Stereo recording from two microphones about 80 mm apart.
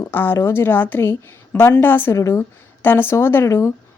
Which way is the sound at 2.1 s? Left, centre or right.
Left.